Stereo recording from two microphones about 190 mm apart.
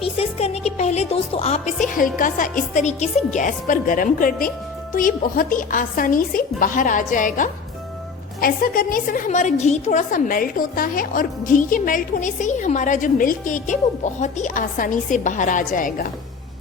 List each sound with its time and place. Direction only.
0.0 s a woman's voice: 30° left (ahead or behind)